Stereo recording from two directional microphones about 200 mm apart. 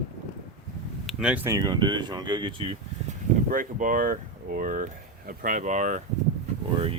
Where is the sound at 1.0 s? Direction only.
5° right (ahead or behind).